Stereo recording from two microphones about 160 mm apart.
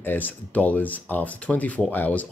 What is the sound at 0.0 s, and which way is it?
Speech, 10° left (ahead or behind).